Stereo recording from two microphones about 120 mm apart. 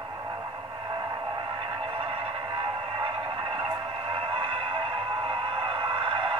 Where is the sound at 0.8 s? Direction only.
40° right (ahead or behind).